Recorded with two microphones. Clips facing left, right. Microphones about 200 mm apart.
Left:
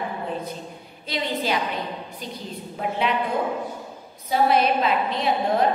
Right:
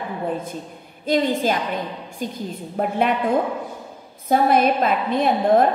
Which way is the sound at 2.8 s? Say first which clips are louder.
Right 5 dB; 50° right (ahead or behind).